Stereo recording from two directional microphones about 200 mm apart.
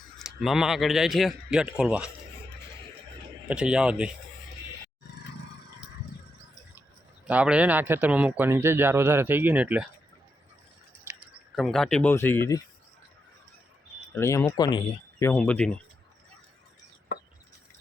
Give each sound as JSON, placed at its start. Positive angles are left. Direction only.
{"t": 0.2, "sound": "a man's voice", "side_deg": 0}
{"t": 3.5, "sound": "a man's voice", "side_deg": -5}
{"t": 7.3, "sound": "a man's voice", "side_deg": -5}
{"t": 11.5, "sound": "speech", "side_deg": 0}
{"t": 14.1, "sound": "speech", "side_deg": 15}
{"t": 15.2, "sound": "a man's voice", "side_deg": 5}